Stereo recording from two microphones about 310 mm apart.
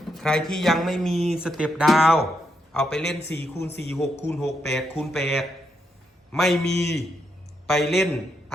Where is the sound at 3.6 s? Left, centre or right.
Left.